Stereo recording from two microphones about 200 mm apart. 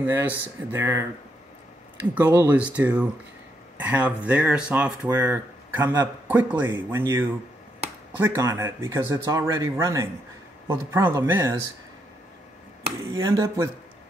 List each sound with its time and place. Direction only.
0.0 s speech: 10° right (ahead or behind)
13.1 s speech: 20° right (ahead or behind)